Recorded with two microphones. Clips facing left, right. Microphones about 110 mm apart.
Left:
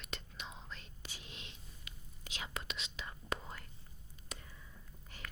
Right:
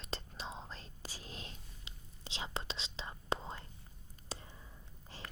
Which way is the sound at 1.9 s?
30° right (ahead or behind).